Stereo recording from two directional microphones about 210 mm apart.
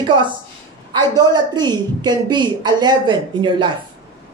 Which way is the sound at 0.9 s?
20° right (ahead or behind).